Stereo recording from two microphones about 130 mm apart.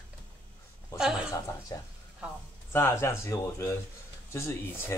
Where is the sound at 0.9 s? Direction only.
25° left (ahead or behind).